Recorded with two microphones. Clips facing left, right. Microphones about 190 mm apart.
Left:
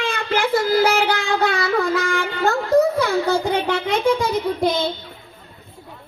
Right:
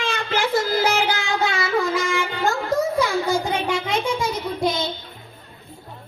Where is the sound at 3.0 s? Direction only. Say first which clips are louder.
Left 2 dB; 60° left (ahead or behind).